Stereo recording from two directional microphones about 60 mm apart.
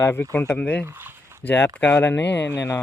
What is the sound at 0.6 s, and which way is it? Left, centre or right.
Speech, left.